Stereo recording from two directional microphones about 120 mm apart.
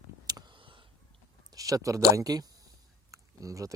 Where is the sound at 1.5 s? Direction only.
30° right (ahead or behind).